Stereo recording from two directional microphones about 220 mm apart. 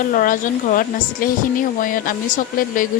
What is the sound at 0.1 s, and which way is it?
Speech, 40° left (ahead or behind).